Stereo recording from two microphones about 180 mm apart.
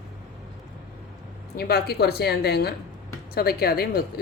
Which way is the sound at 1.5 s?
60° left (ahead or behind).